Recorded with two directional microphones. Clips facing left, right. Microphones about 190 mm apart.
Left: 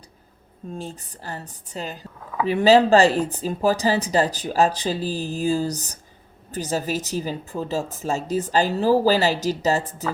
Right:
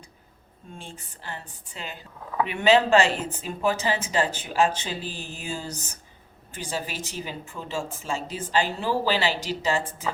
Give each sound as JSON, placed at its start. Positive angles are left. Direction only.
{"t": 0.8, "sound": "speech", "side_deg": 40}